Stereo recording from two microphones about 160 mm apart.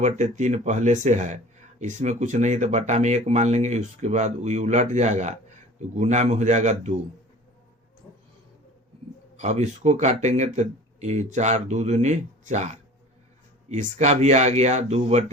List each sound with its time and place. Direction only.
0.0 s speech: 50° right (ahead or behind)
9.4 s speech: 45° right (ahead or behind)